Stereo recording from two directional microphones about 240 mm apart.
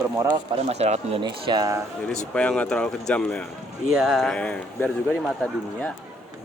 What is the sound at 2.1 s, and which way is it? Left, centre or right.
Speech, centre.